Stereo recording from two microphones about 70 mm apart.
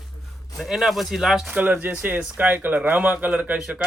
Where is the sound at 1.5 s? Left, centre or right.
Right.